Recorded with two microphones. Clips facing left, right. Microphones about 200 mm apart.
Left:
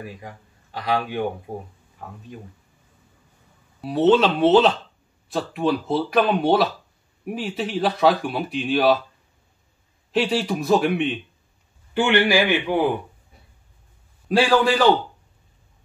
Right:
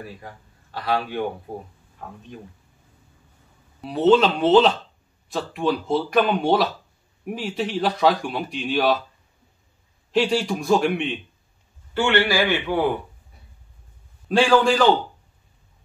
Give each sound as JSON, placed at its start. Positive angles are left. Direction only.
{"t": 0.0, "sound": "speech", "side_deg": 15}
{"t": 3.8, "sound": "speech", "side_deg": 0}
{"t": 10.1, "sound": "speech", "side_deg": 5}
{"t": 11.9, "sound": "a man's voice", "side_deg": 15}
{"t": 14.3, "sound": "speech", "side_deg": 5}